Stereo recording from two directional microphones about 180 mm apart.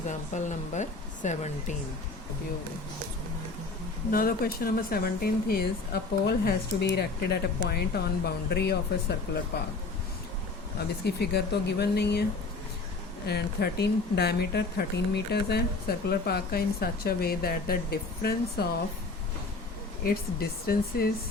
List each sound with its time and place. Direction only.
0.1 s speech: 40° left (ahead or behind)
4.1 s speech: 55° left (ahead or behind)
11.0 s speech: 65° left (ahead or behind)
13.2 s speech: 65° left (ahead or behind)
20.1 s speech: 55° left (ahead or behind)